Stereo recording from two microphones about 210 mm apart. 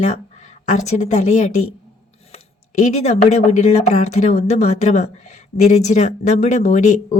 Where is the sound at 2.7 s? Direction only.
35° left (ahead or behind).